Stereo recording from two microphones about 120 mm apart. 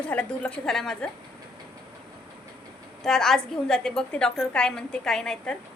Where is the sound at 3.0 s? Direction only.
5° left (ahead or behind).